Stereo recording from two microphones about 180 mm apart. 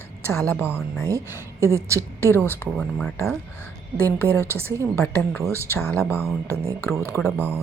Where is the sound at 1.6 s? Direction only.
15° right (ahead or behind).